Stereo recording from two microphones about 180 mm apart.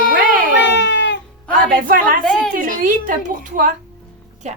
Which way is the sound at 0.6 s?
75° left (ahead or behind).